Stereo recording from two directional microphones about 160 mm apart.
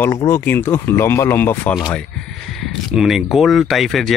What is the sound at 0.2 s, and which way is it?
Speech, 15° left (ahead or behind).